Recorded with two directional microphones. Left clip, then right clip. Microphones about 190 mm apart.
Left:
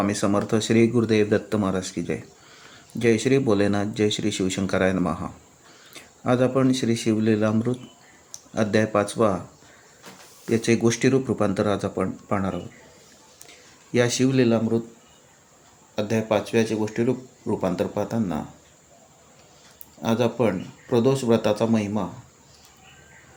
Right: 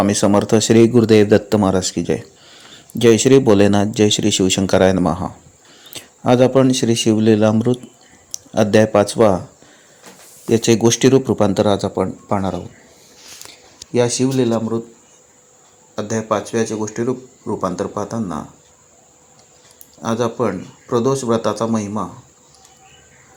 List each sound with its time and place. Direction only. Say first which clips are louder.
0.0 s speech: right 8 dB; 30° right (ahead or behind)
10.5 s speech: right 7 dB; 30° right (ahead or behind)
13.9 s speech: right 4 dB; 10° right (ahead or behind)
16.0 s a man's voice: right 3 dB; 10° left (ahead or behind)
17.1 s speech: right 3 dB; 5° right (ahead or behind)
18.0 s a man's voice: right 3 dB; 10° left (ahead or behind)
20.0 s a man's voice: right 3 dB; 10° left (ahead or behind)